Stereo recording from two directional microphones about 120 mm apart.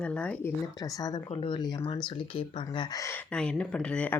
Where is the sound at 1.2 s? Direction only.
50° left (ahead or behind); by 3.1 s 30° left (ahead or behind).